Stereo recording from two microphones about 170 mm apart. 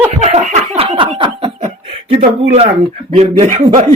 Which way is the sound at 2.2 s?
40° right (ahead or behind).